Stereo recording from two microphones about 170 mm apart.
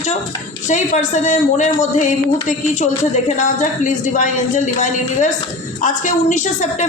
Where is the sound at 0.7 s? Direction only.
45° left (ahead or behind).